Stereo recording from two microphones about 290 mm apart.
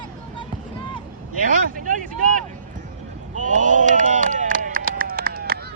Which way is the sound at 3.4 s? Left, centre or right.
Right.